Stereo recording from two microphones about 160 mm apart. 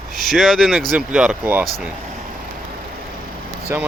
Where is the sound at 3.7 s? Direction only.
15° right (ahead or behind).